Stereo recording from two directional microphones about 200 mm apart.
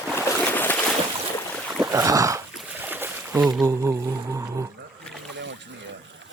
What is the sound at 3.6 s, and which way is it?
Speech, 15° right (ahead or behind).